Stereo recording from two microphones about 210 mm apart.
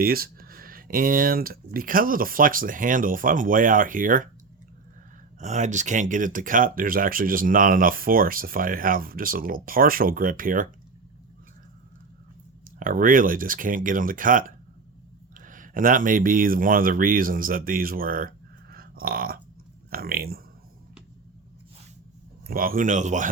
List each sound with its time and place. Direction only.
0.0 s speech: 45° right (ahead or behind)
5.4 s speech: 35° right (ahead or behind)
12.8 s speech: 40° right (ahead or behind)
22.4 s speech: 45° right (ahead or behind)